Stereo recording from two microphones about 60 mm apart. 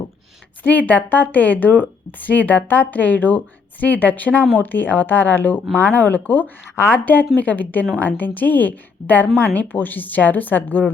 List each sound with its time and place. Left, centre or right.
0.6 s a woman's voice: left